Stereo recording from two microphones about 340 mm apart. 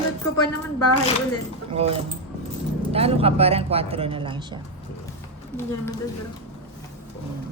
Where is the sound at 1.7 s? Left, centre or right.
Centre.